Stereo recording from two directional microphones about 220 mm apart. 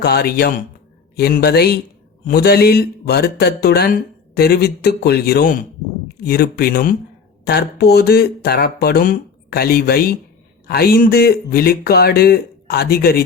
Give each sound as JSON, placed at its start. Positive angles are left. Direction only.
{"t": 0.0, "sound": "speech", "side_deg": 45}